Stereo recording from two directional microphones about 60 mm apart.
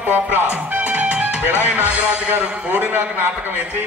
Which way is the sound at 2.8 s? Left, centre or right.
Right.